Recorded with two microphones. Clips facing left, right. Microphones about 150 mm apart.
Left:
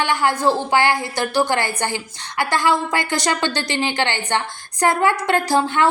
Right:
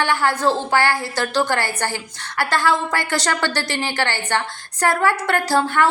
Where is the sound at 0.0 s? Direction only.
15° left (ahead or behind).